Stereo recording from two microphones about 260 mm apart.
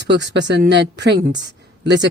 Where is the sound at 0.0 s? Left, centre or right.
Right.